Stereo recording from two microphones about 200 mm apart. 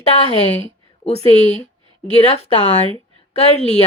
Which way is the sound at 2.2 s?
30° left (ahead or behind).